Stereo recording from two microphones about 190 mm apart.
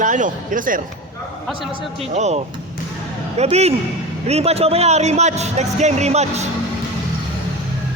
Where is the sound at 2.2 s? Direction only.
35° right (ahead or behind).